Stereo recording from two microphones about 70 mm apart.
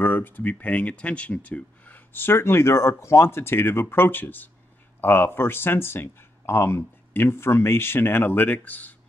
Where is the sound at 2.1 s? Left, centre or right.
Left.